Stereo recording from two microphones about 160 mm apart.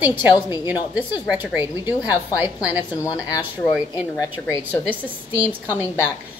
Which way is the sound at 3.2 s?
25° left (ahead or behind).